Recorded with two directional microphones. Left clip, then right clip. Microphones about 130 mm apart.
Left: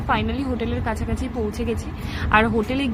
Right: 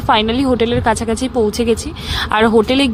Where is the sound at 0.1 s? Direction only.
60° right (ahead or behind).